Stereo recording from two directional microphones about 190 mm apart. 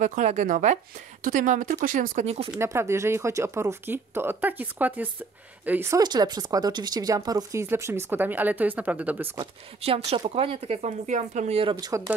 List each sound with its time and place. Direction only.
0.0 s speech: 40° right (ahead or behind)
2.5 s speech: 15° right (ahead or behind)
9.4 s speech: 30° right (ahead or behind)
11.7 s speech: 15° right (ahead or behind)